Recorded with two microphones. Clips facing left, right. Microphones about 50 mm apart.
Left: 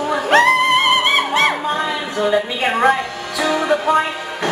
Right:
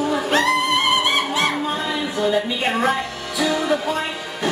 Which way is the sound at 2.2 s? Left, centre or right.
Centre.